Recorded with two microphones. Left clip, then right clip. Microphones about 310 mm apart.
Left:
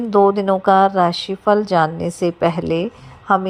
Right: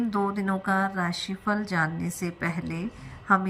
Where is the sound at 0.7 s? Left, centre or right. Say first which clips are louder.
Left 15 dB; left.